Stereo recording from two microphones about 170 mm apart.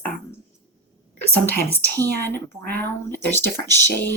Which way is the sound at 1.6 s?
10° left (ahead or behind).